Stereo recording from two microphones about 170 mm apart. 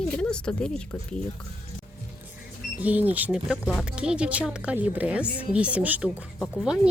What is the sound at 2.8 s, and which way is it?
Speech, 10° right (ahead or behind).